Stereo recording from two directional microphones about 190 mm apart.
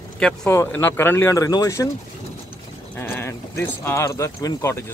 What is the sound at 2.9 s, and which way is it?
Speech, 10° left (ahead or behind).